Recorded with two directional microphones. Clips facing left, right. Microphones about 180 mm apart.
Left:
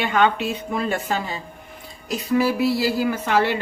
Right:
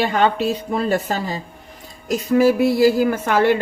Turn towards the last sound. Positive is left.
turn(degrees=-50)  # may be behind; listen again after turning